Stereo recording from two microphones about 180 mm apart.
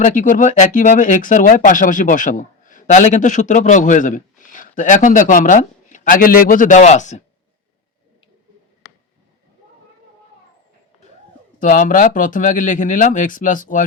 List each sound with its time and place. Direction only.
0.0 s speech: 45° left (ahead or behind)
11.6 s speech: 45° left (ahead or behind)